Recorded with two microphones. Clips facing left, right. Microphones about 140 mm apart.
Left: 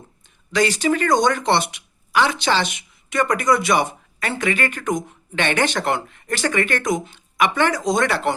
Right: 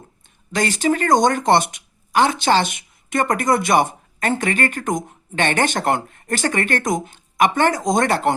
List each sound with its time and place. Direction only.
0.5 s speech: 50° right (ahead or behind)